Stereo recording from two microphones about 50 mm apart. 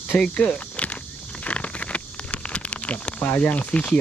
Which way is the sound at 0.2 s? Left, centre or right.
Left.